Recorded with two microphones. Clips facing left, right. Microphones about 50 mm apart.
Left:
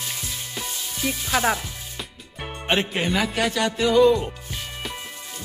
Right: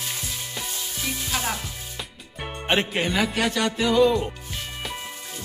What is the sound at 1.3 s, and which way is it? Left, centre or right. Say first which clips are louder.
Chopping: left 7 dB; left.